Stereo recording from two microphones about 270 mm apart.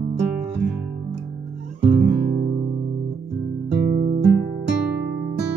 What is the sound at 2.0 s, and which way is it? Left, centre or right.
Guitar, right.